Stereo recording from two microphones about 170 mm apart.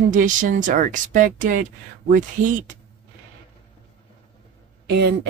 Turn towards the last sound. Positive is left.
turn(degrees=-80)